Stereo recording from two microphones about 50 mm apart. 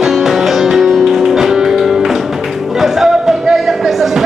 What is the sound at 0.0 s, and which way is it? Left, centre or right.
Music, centre.